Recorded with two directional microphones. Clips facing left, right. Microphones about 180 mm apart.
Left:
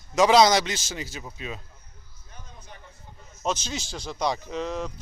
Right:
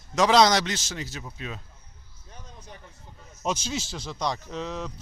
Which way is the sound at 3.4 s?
10° right (ahead or behind).